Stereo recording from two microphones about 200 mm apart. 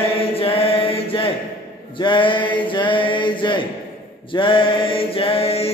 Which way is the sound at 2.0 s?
25° left (ahead or behind).